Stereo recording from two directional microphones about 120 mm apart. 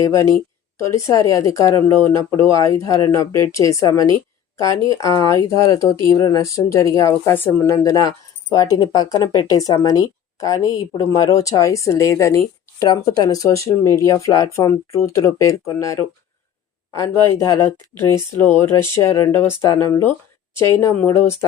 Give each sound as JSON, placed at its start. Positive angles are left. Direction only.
{"t": 0.0, "sound": "speech", "side_deg": 25}